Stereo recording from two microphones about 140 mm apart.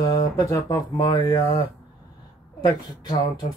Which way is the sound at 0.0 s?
30° left (ahead or behind).